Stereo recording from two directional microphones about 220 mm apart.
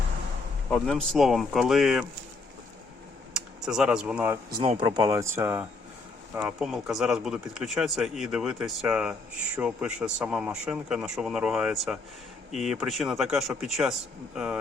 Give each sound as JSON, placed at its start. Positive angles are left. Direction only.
{"t": 0.7, "sound": "speech", "side_deg": 0}
{"t": 3.3, "sound": "speech", "side_deg": -5}
{"t": 4.6, "sound": "speech", "side_deg": -25}